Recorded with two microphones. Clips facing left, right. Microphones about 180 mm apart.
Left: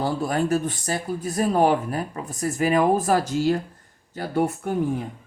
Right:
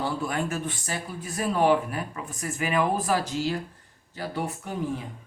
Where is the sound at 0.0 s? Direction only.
40° left (ahead or behind).